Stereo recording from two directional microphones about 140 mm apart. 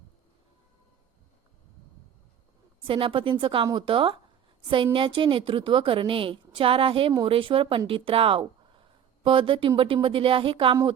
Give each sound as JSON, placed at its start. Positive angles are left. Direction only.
{"t": 2.8, "sound": "a woman's voice", "side_deg": -40}